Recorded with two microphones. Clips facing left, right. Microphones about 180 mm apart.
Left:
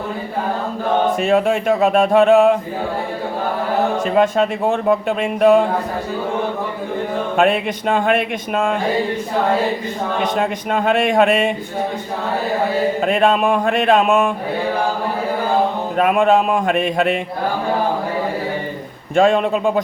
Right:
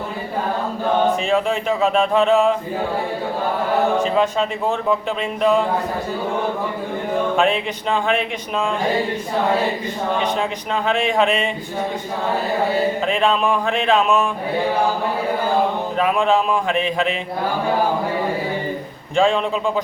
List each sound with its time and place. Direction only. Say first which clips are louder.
1.2 s speech: left 4 dB; 55° left (ahead or behind)
4.0 s a man's voice: left 3 dB; 50° left (ahead or behind)
7.3 s speech: left 3 dB; 55° left (ahead or behind)
10.7 s a man's voice: left 4 dB; 50° left (ahead or behind)
13.1 s a man's voice: left 6 dB; 50° left (ahead or behind)
16.0 s a man's voice: left 4 dB; 50° left (ahead or behind)
19.1 s speech: left 3 dB; 55° left (ahead or behind)